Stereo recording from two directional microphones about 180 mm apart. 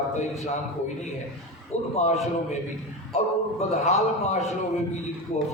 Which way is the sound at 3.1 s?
35° left (ahead or behind).